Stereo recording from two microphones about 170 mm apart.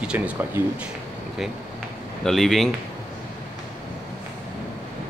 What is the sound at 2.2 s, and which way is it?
Speech, centre (ahead or behind).